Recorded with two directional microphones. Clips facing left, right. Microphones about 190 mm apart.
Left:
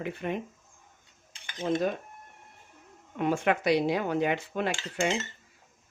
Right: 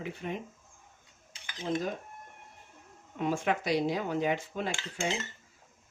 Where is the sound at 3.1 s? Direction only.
65° left (ahead or behind).